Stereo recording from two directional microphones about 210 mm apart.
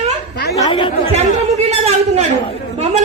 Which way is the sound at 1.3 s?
30° right (ahead or behind).